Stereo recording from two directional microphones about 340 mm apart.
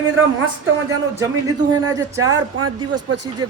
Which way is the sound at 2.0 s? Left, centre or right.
Centre.